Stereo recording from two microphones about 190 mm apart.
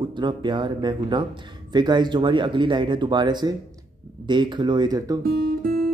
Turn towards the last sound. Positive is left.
turn(degrees=-50)  # may be behind; listen again after turning